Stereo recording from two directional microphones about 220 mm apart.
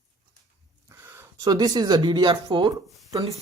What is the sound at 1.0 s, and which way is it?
Speech, 15° right (ahead or behind).